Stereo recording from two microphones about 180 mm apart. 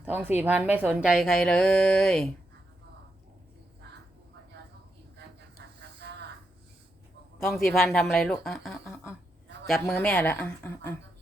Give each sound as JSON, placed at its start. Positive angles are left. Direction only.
{"t": 0.0, "sound": "a woman's voice", "side_deg": -10}
{"t": 6.0, "sound": "a sound", "side_deg": -65}
{"t": 7.3, "sound": "a woman's voice", "side_deg": 0}